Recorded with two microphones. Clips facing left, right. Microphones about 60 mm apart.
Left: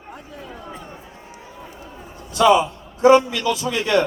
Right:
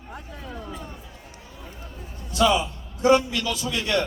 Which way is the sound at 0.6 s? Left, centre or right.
Left.